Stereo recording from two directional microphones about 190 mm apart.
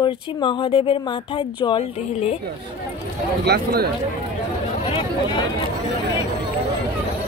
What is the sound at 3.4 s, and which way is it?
Speech, 55° right (ahead or behind).